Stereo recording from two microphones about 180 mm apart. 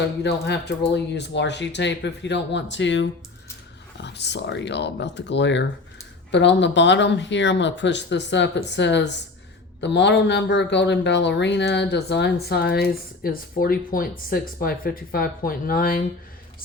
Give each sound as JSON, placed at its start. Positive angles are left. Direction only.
{"t": 0.2, "sound": "speech", "side_deg": 70}
{"t": 3.9, "sound": "speech", "side_deg": 75}